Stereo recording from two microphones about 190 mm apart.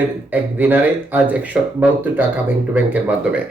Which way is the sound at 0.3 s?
10° right (ahead or behind).